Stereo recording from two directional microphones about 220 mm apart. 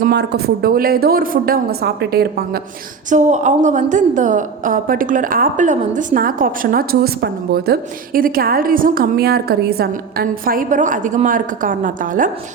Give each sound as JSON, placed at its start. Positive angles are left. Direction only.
{"t": 0.0, "sound": "a woman's voice", "side_deg": -45}
{"t": 3.1, "sound": "a woman's voice", "side_deg": -35}